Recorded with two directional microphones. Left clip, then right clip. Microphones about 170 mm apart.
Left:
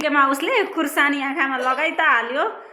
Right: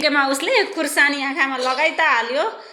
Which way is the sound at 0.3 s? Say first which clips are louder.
Right 2 dB; 5° left (ahead or behind).